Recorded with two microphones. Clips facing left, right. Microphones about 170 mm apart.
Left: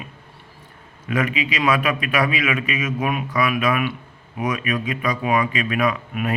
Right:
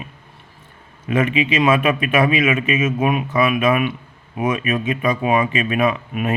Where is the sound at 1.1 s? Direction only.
25° right (ahead or behind).